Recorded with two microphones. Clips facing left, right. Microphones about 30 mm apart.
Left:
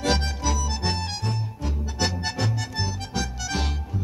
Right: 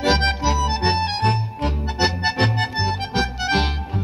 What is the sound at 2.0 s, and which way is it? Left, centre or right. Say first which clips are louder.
Music: right 7 dB; right.